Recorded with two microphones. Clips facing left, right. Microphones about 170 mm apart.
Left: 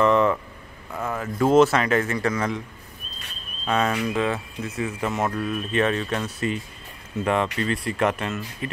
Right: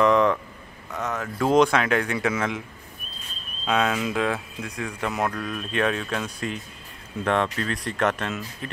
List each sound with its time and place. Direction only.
0.0 s a sound: centre (ahead or behind)
0.9 s speech: 5° left (ahead or behind)
3.6 s speech: centre (ahead or behind)